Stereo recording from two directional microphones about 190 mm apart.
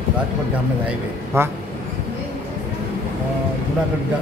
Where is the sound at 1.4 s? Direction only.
15° right (ahead or behind).